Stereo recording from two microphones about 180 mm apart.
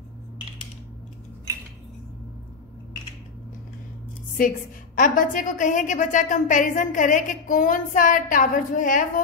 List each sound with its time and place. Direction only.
4.4 s a woman's voice: 45° left (ahead or behind)